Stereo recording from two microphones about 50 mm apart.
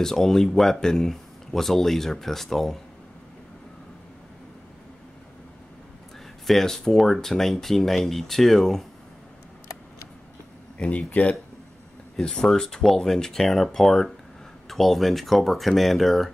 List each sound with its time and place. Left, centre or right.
0.0 s speech: centre
6.4 s speech: centre
10.8 s speech: centre
12.4 s speech: centre